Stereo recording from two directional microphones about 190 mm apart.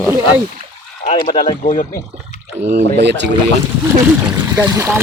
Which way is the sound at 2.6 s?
35° right (ahead or behind).